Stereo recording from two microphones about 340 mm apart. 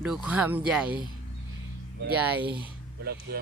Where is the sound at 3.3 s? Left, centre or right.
Right.